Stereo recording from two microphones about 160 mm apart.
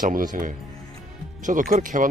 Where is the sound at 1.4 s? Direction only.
55° right (ahead or behind).